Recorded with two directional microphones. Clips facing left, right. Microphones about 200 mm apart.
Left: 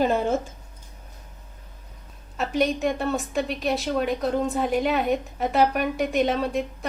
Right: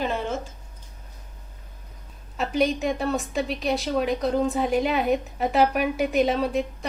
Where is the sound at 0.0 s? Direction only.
45° left (ahead or behind).